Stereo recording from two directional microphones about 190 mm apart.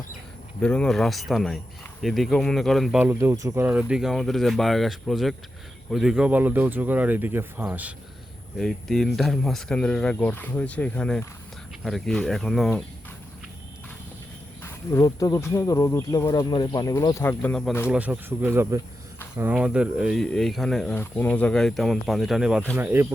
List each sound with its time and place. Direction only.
0.6 s speech: 5° left (ahead or behind)
14.6 s speech: 15° left (ahead or behind)
17.8 s speech: 5° right (ahead or behind)